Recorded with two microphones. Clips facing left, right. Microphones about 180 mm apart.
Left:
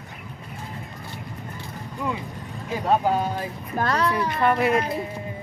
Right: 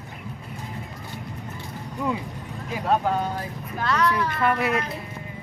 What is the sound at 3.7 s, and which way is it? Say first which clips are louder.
Speech: left 2 dB; 45° left (ahead or behind).